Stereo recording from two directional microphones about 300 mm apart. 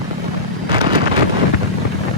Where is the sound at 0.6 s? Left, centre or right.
Centre.